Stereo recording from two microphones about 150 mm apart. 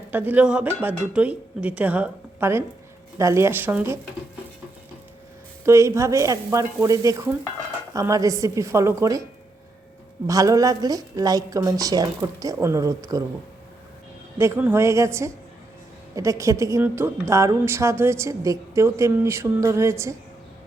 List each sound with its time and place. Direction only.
0.1 s speech: 10° right (ahead or behind)
5.6 s speech: 20° right (ahead or behind)
10.2 s speech: 20° right (ahead or behind)
14.3 s speech: 15° right (ahead or behind)